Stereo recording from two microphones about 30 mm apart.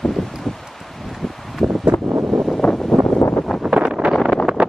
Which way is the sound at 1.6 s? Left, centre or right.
Centre.